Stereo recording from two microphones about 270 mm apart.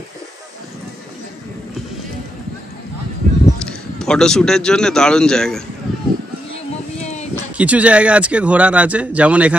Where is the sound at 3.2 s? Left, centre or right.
Right.